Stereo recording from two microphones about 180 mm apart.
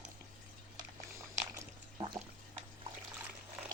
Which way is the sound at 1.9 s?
25° right (ahead or behind).